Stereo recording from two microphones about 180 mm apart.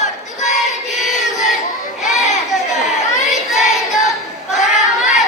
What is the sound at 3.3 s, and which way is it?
Child singing, 40° left (ahead or behind).